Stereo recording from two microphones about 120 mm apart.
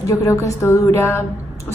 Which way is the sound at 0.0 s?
30° left (ahead or behind).